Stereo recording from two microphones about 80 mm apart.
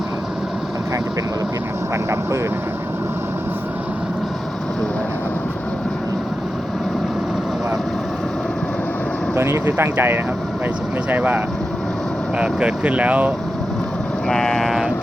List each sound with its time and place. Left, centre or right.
9.3 s speech: right
14.3 s speech: centre